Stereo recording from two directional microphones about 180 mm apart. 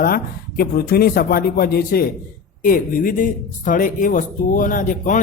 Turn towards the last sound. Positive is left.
turn(degrees=45)  # may be behind; listen again after turning